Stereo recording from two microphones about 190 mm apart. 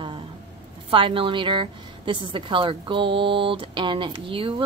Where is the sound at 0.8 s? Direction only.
25° right (ahead or behind).